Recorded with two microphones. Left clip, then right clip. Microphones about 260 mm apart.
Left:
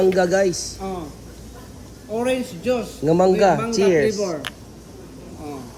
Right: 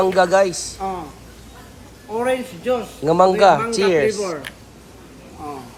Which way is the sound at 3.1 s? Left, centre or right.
Right.